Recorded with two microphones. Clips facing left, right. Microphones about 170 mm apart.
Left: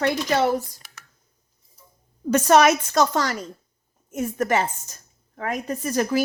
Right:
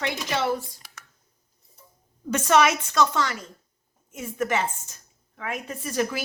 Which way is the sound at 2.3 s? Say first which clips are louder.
Left 4 dB; 40° left (ahead or behind).